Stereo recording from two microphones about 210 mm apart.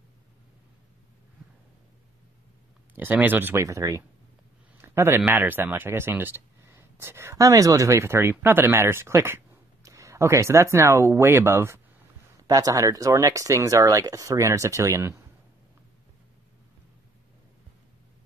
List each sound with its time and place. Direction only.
3.0 s speech: 10° right (ahead or behind)